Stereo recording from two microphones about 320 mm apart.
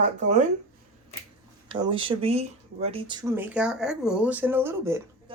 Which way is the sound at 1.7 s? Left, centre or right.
Centre.